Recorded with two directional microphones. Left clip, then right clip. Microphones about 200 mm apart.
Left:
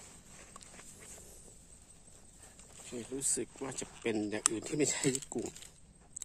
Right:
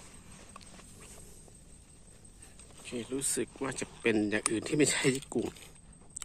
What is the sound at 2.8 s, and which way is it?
Speech, 10° left (ahead or behind).